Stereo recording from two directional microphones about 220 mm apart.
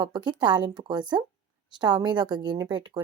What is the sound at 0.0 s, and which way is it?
Speech, 20° right (ahead or behind).